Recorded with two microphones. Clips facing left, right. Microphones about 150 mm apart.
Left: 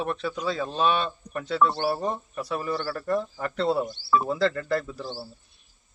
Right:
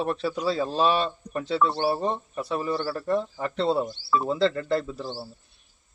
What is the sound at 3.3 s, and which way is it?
Speech, 25° right (ahead or behind).